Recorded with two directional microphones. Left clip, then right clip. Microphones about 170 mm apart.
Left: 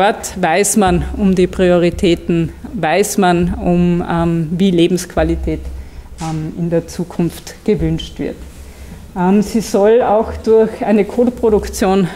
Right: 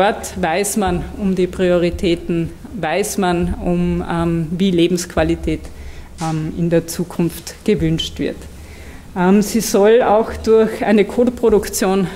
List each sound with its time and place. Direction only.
0.0 s speech: 25° left (ahead or behind)
0.7 s speech: 65° left (ahead or behind); by 5.4 s 20° left (ahead or behind)
6.2 s speech: centre (ahead or behind)
7.1 s speech: 20° left (ahead or behind)
7.7 s speech: 5° left (ahead or behind)
9.1 s speech: 15° left (ahead or behind)